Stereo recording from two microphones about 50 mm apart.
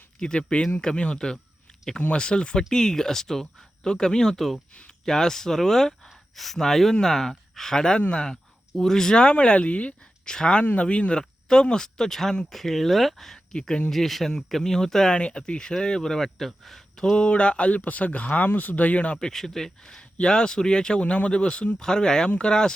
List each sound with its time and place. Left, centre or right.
0.2 s speech: centre
13.9 s speech: centre; by 19.2 s left
19.2 s speech: centre
21.0 s speech: left